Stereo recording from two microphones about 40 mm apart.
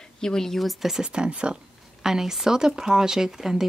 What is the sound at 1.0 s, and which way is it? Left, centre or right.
Speech, right.